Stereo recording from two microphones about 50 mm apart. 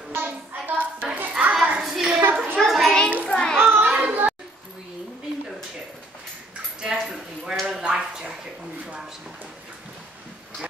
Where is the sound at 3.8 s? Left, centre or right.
Right.